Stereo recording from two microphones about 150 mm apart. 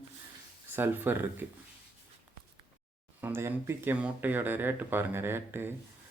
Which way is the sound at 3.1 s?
15° right (ahead or behind).